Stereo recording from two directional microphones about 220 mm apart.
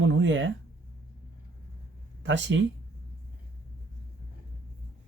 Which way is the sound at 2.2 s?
55° right (ahead or behind).